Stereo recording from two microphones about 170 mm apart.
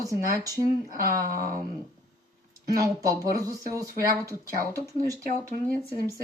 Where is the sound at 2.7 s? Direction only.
20° right (ahead or behind).